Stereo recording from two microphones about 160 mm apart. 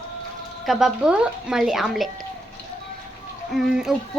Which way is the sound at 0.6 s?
Centre (ahead or behind).